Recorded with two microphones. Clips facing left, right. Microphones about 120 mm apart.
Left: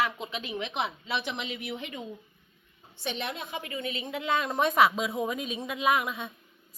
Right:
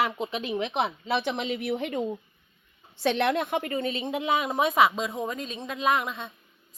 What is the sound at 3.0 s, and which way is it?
Speech, 85° right.